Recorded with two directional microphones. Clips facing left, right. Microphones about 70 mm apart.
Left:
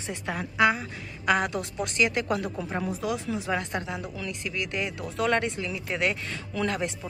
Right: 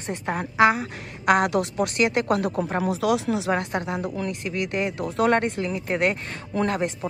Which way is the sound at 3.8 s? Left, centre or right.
Right.